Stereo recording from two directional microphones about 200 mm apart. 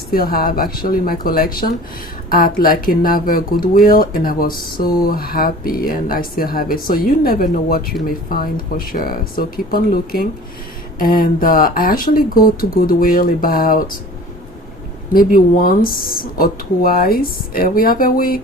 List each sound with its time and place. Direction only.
0.1 s speech: 45° left (ahead or behind)
15.1 s speech: 45° left (ahead or behind)